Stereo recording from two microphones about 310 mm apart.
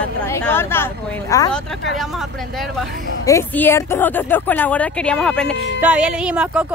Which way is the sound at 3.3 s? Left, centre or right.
Centre.